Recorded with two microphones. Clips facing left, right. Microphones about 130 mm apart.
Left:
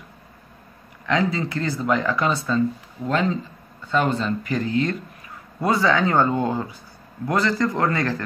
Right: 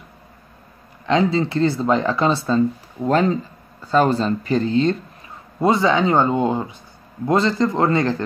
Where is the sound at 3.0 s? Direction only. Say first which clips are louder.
Right 5 dB; 40° right (ahead or behind); by 8.2 s 25° right (ahead or behind).